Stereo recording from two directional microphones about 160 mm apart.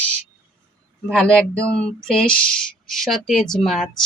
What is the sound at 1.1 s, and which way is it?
Speech, 5° left (ahead or behind).